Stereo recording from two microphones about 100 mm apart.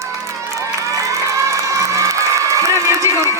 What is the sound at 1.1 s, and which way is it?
Crowd, 30° right (ahead or behind).